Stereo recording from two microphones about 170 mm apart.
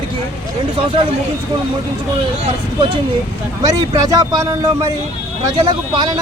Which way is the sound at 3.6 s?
20° right (ahead or behind).